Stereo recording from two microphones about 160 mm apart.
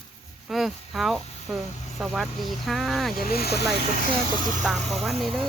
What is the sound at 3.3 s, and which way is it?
Speech, 80° left.